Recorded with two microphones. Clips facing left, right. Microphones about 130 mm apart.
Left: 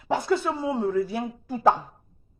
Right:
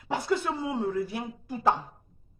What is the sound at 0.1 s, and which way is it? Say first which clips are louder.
Speech: left 4 dB; 25° left (ahead or behind).